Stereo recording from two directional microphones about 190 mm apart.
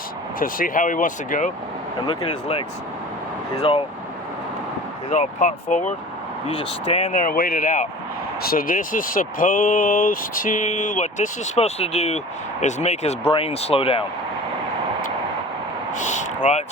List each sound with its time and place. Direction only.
0.3 s speech: 45° left (ahead or behind)
2.0 s speech: 25° left (ahead or behind)
5.0 s speech: 40° left (ahead or behind)
15.9 s vehicle: 40° left (ahead or behind)